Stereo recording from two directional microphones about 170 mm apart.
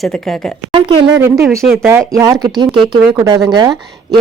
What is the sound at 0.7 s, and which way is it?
Speech, 25° right (ahead or behind).